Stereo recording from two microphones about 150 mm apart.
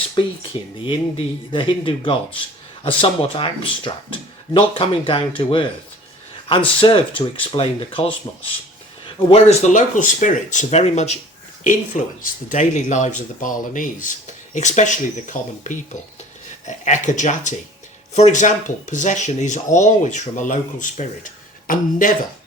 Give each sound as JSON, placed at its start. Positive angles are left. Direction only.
{"t": 0.9, "sound": "speech", "side_deg": 35}
{"t": 6.7, "sound": "speech", "side_deg": 40}
{"t": 11.6, "sound": "speech", "side_deg": 60}